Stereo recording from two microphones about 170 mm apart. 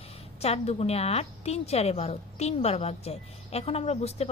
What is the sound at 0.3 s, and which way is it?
A woman's voice, 40° left (ahead or behind).